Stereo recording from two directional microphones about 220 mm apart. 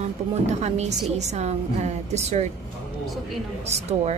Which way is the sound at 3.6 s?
30° right (ahead or behind).